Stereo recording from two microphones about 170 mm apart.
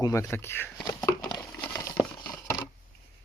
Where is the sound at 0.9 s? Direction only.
25° left (ahead or behind).